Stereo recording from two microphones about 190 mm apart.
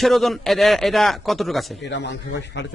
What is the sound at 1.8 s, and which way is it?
Speech, 65° left (ahead or behind).